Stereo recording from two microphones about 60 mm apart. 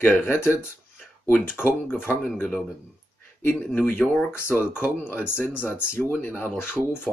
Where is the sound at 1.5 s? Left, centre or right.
Left.